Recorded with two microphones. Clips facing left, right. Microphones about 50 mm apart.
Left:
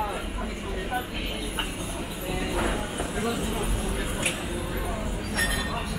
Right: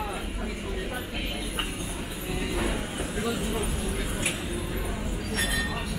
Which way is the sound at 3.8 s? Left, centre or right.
Centre.